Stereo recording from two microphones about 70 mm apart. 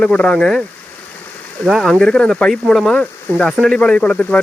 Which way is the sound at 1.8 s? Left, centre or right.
Centre.